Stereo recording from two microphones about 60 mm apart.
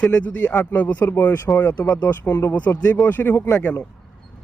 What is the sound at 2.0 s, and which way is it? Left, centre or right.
Speech, left.